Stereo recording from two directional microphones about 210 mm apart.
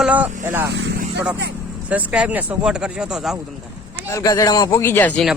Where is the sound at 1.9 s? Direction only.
5° right (ahead or behind).